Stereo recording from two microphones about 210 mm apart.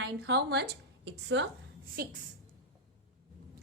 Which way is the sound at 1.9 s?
45° right (ahead or behind).